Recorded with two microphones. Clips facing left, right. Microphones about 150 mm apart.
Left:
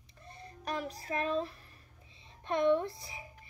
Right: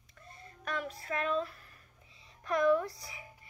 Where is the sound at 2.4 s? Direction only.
25° left (ahead or behind).